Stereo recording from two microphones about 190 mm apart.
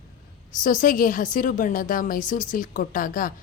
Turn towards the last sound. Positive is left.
turn(degrees=45)  # may be behind; listen again after turning